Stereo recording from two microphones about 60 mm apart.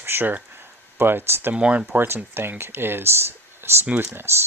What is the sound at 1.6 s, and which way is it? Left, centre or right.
Speech, centre.